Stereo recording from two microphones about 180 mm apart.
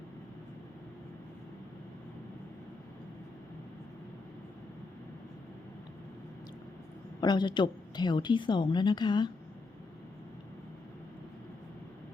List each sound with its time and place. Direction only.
7.2 s a woman's voice: 25° left (ahead or behind)